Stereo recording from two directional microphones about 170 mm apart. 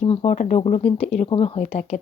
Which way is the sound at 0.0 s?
40° left (ahead or behind).